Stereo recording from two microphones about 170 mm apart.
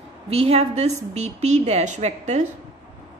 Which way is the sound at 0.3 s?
35° right (ahead or behind).